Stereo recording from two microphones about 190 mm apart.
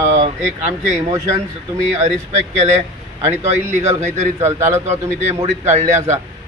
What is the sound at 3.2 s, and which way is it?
Speech, 35° right (ahead or behind).